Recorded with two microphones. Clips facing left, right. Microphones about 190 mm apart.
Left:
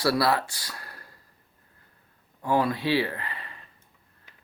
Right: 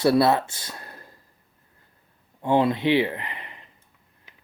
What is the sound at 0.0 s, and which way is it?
Speech, 20° right (ahead or behind).